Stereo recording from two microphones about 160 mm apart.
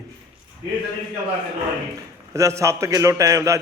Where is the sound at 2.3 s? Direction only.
20° right (ahead or behind).